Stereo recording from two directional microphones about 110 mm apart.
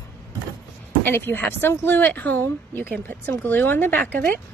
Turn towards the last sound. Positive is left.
turn(degrees=15)  # may be behind; listen again after turning